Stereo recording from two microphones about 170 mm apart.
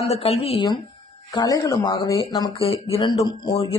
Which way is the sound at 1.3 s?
20° left (ahead or behind).